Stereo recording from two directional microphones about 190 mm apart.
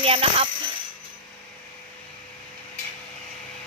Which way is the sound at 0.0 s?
30° right (ahead or behind).